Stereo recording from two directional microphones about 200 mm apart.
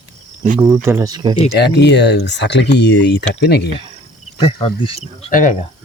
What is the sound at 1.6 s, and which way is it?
Speech, 55° left (ahead or behind).